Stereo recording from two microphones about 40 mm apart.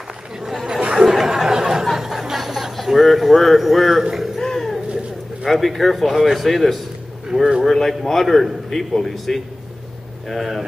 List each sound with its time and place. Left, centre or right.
0.7 s chatter: right
1.2 s a sound: centre
4.4 s a sound: centre
5.4 s a man's voice: centre
7.3 s a man's voice: centre
7.6 s a man's voice: centre